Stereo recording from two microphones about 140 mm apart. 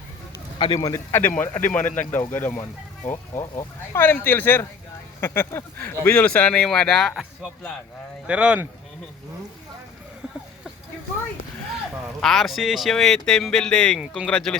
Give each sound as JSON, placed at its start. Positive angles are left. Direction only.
{"t": 0.3, "sound": "speech", "side_deg": 30}
{"t": 3.3, "sound": "speech", "side_deg": 30}
{"t": 3.9, "sound": "speech", "side_deg": 15}
{"t": 8.3, "sound": "speech", "side_deg": -10}
{"t": 12.2, "sound": "speech", "side_deg": 0}